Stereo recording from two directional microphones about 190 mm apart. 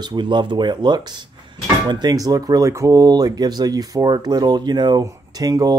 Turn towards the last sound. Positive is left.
turn(degrees=-20)  # may be behind; listen again after turning